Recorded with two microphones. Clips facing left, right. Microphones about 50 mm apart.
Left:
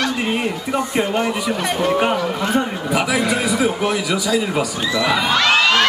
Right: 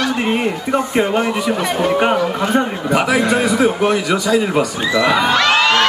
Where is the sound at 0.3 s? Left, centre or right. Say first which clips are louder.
Right 4 dB; centre.